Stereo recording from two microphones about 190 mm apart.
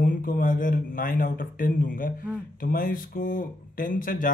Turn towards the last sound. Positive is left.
turn(degrees=45)  # may be behind; listen again after turning